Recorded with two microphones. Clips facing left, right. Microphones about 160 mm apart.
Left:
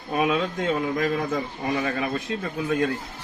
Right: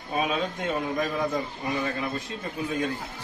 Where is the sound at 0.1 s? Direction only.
70° left (ahead or behind).